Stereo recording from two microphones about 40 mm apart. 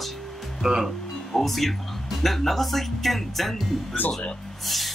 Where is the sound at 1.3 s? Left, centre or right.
Centre.